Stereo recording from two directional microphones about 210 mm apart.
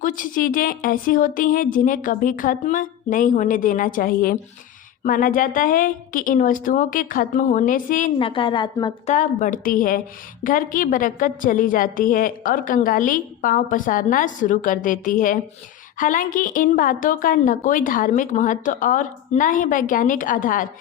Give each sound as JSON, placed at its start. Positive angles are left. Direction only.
{"t": 0.0, "sound": "a woman's voice", "side_deg": 40}
{"t": 8.2, "sound": "a woman's voice", "side_deg": 25}
{"t": 9.1, "sound": "a woman's voice", "side_deg": 40}